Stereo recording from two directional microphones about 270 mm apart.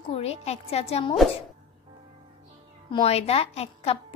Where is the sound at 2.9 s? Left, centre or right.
Left.